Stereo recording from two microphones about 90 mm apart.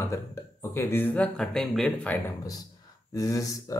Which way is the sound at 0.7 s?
25° left (ahead or behind).